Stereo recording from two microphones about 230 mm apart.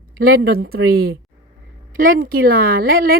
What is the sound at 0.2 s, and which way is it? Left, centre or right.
A woman's voice, right.